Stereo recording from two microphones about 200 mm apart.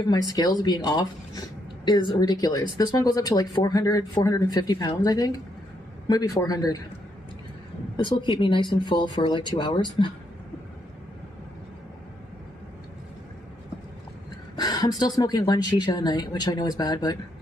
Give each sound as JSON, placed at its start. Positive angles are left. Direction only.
{"t": 0.3, "sound": "speech", "side_deg": 20}
{"t": 7.9, "sound": "speech", "side_deg": 25}
{"t": 14.5, "sound": "a sound", "side_deg": 20}
{"t": 15.0, "sound": "speech", "side_deg": 20}